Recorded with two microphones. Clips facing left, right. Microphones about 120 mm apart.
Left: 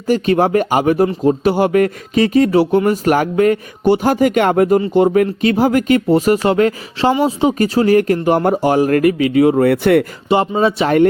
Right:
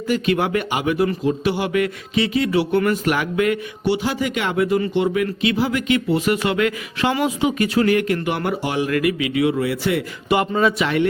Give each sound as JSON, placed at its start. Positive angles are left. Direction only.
{"t": 0.1, "sound": "speech", "side_deg": 40}
{"t": 10.2, "sound": "speech", "side_deg": 25}